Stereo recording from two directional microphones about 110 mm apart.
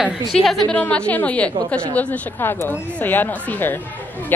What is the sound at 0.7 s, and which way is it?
A woman's voice, 10° left (ahead or behind).